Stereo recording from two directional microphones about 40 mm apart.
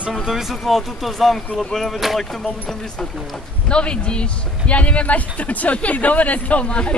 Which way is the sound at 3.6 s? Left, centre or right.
Left.